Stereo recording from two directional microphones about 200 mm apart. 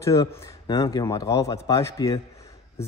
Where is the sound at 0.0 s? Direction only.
15° left (ahead or behind).